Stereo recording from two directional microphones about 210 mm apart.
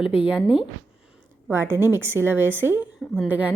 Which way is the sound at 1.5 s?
10° right (ahead or behind).